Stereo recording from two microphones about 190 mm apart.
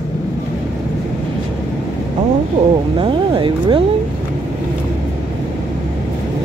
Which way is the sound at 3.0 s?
25° right (ahead or behind).